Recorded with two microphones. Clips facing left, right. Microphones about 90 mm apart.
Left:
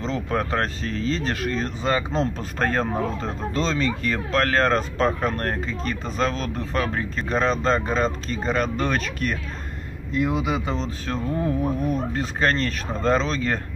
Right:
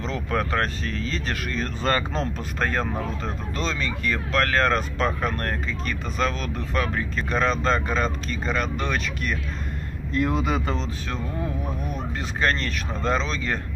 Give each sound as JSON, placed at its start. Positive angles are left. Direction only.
{"t": 0.0, "sound": "speech", "side_deg": 30}
{"t": 1.8, "sound": "speech", "side_deg": 10}
{"t": 2.6, "sound": "speech", "side_deg": 35}
{"t": 10.1, "sound": "speech", "side_deg": 10}
{"t": 10.8, "sound": "speech", "side_deg": 35}